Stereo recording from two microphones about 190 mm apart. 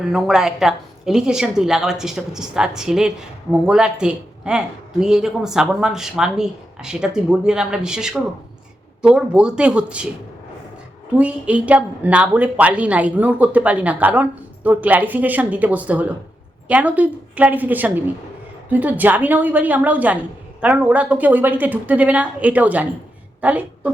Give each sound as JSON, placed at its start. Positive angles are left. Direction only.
{"t": 0.0, "sound": "speech", "side_deg": 0}
{"t": 11.2, "sound": "a woman's voice", "side_deg": -5}